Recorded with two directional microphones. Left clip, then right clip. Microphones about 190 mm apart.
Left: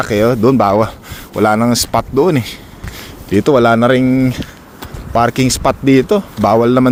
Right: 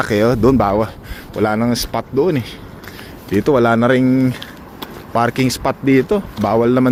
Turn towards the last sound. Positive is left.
turn(degrees=25)  # may be behind; listen again after turning